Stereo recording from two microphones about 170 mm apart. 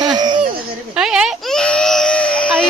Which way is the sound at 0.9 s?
5° right (ahead or behind).